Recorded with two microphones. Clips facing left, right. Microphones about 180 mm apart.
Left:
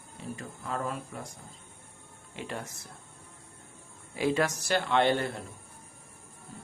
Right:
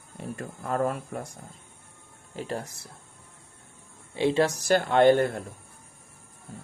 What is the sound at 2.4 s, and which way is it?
Speech, 35° right (ahead or behind).